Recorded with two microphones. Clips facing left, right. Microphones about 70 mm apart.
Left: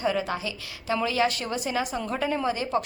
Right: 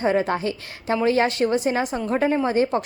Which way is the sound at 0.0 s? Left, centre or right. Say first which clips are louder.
Right 6 dB; right.